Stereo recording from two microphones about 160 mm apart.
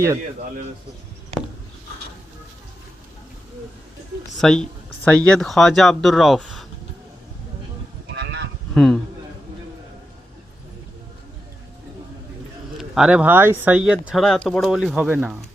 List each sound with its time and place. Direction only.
4.4 s speech: 5° left (ahead or behind)
8.1 s a sound: 90° right
8.7 s speech: centre (ahead or behind)
12.7 s speech: 5° right (ahead or behind)